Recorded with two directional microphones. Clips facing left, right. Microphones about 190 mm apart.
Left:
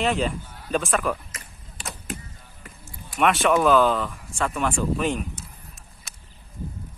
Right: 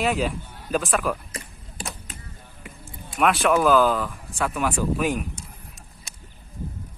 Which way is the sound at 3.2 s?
Centre (ahead or behind).